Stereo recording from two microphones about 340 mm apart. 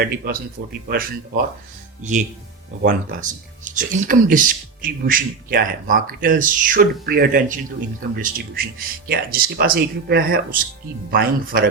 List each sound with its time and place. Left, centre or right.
0.0 s speech: right
2.8 s speech: right